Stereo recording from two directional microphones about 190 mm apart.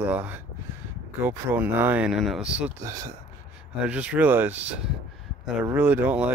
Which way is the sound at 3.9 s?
5° right (ahead or behind).